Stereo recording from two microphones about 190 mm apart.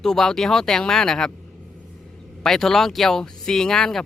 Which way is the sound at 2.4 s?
Centre (ahead or behind).